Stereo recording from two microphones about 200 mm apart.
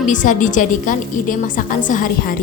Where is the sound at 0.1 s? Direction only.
40° left (ahead or behind).